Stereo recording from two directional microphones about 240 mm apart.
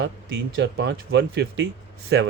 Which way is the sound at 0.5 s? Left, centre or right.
Right.